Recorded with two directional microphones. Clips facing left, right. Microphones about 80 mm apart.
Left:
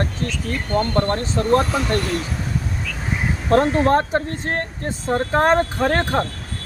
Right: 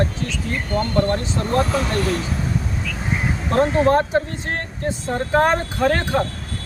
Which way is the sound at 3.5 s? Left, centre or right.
Left.